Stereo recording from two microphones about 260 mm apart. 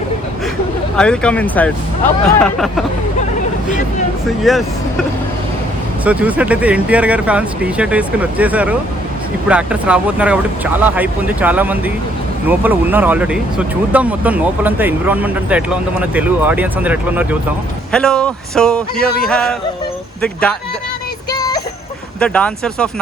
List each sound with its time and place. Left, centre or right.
0.9 s speech: centre
4.5 s speech: centre
6.1 s speech: centre
21.2 s music: centre
22.2 s speech: centre